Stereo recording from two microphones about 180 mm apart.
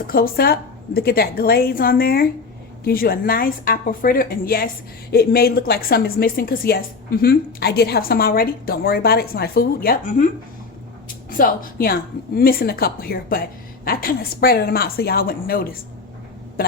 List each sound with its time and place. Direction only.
0.1 s a woman's voice: 55° left (ahead or behind)
11.3 s a woman's voice: 50° left (ahead or behind)